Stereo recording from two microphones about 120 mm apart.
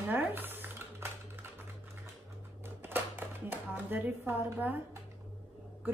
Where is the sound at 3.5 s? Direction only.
15° right (ahead or behind).